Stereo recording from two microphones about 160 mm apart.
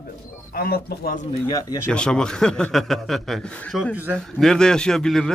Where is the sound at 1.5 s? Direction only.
20° left (ahead or behind).